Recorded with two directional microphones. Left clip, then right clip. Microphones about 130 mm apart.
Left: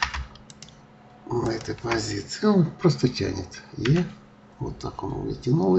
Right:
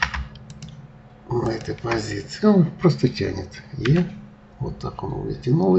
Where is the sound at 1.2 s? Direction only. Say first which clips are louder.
Right 2 dB; centre (ahead or behind).